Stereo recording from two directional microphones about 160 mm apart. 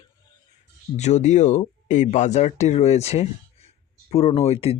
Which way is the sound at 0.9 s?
45° left (ahead or behind).